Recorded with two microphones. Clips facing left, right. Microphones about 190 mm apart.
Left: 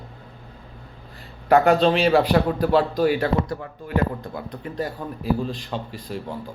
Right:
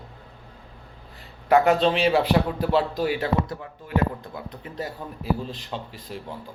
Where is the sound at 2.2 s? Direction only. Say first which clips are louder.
Left 3 dB; 45° left (ahead or behind).